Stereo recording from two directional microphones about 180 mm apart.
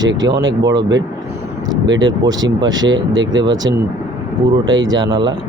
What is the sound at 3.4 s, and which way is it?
Speech, 20° right (ahead or behind).